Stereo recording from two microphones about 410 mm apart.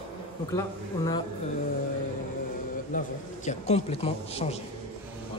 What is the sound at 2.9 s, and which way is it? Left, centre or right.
A man's voice, centre.